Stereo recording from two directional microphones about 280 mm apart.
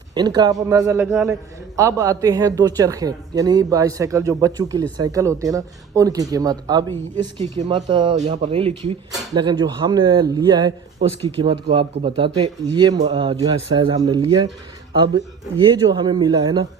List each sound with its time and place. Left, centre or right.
0.1 s a man's voice: centre